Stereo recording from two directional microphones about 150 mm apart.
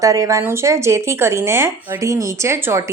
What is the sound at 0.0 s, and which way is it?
Speech, 20° right (ahead or behind).